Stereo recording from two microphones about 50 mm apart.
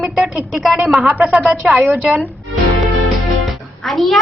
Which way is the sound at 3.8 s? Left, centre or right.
Centre.